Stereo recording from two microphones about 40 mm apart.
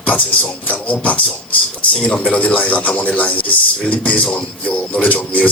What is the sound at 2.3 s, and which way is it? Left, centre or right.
Speech, left.